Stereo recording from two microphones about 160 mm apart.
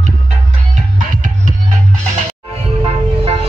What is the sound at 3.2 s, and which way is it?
Music, 40° right (ahead or behind).